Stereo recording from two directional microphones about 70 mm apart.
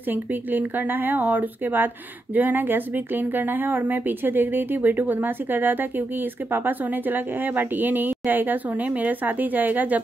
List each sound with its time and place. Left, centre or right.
0.1 s a woman's voice: right